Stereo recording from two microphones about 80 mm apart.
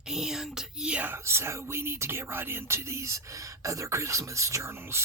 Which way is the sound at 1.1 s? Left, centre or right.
Right.